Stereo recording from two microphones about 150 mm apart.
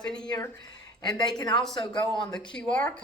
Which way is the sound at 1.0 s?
25° left (ahead or behind).